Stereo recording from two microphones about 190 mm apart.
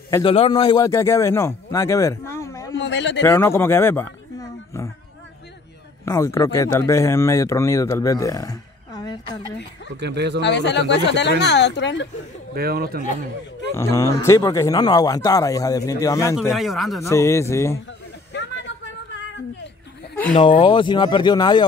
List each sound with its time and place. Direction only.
0.2 s speech: 30° left (ahead or behind)
2.7 s a sound: 65° left (ahead or behind)
3.3 s speech: 15° left (ahead or behind)
6.0 s speech: 15° left (ahead or behind)
9.9 s speech: 65° right (ahead or behind)
10.4 s speech: 65° left (ahead or behind)
12.5 s speech: 55° right (ahead or behind)
13.7 s a man's voice: 15° left (ahead or behind)
16.5 s speech: centre (ahead or behind)
17.0 s speech: 15° left (ahead or behind)
18.3 s a sound: 70° left (ahead or behind)
20.3 s a man's voice: 30° left (ahead or behind)